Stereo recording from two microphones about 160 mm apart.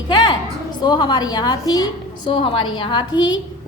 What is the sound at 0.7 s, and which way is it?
A woman's voice, 25° left (ahead or behind).